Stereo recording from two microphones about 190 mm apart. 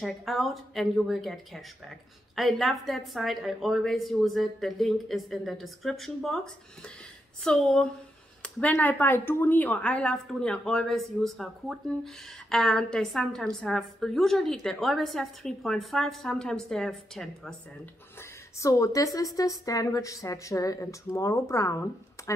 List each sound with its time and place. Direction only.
0.0 s speech: centre (ahead or behind)
18.6 s a woman's voice: 15° left (ahead or behind)